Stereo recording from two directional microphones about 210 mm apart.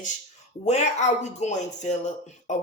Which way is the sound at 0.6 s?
30° left (ahead or behind).